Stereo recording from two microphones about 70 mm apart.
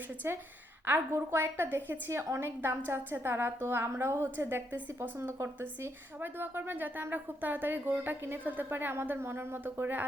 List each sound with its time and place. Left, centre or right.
0.2 s a woman's voice: right